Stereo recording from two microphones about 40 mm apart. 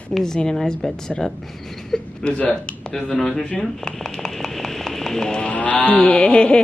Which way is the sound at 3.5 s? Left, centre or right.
Centre.